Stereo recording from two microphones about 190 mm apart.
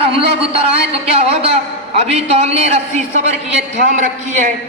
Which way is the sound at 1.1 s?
30° right (ahead or behind).